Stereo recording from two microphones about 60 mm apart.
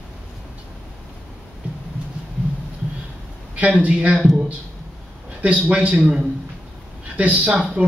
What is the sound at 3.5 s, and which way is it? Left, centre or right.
Speech, right.